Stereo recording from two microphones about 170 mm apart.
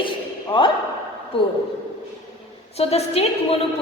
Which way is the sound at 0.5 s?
30° left (ahead or behind).